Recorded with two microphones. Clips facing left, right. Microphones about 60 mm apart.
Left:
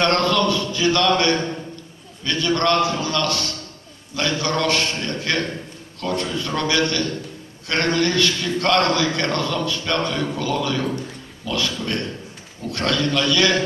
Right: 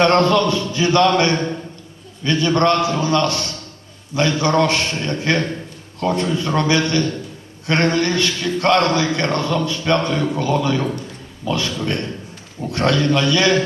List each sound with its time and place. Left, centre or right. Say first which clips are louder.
0.0 s a man's voice: right 4 dB; right